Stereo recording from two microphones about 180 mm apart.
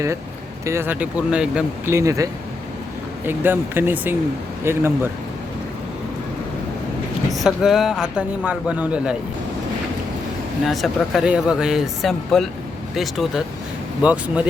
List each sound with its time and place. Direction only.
0.6 s speech: 15° right (ahead or behind)
2.0 s speech: 20° right (ahead or behind)
7.3 s a man's voice: centre (ahead or behind)
10.7 s a man's voice: centre (ahead or behind)